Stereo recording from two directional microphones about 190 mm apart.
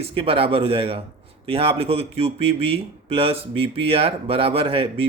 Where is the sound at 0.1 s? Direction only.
30° right (ahead or behind).